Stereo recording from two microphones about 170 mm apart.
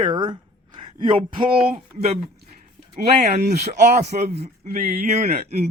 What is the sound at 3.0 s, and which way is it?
Speech, 40° right (ahead or behind).